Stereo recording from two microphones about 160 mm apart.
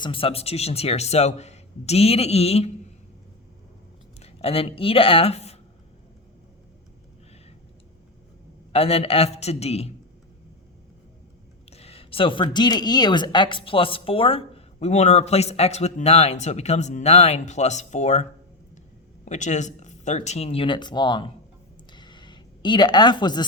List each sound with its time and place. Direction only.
0.0 s speech: 35° left (ahead or behind)
4.2 s speech: 40° left (ahead or behind)
8.7 s speech: 40° left (ahead or behind)
11.7 s speech: 40° left (ahead or behind)
21.9 s a sound: 30° left (ahead or behind)